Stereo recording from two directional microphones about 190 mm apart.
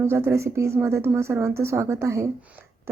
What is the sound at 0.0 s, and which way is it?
A woman's voice, 15° right (ahead or behind).